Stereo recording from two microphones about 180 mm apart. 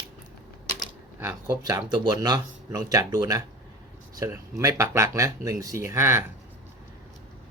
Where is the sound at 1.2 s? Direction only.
15° right (ahead or behind).